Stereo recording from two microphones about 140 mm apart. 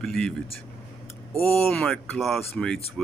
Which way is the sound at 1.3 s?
Centre (ahead or behind).